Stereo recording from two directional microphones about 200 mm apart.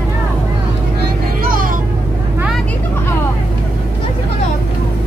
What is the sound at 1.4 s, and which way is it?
Music, 45° right (ahead or behind).